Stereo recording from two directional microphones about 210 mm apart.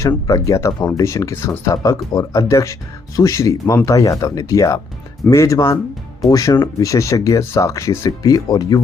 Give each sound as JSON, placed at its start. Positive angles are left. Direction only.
{"t": 0.0, "sound": "speech", "side_deg": 15}